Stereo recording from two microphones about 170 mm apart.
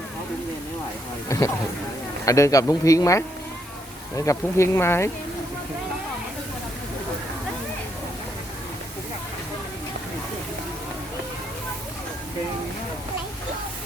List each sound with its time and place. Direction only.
1.3 s speech: 20° left (ahead or behind)
4.3 s speech: 15° left (ahead or behind)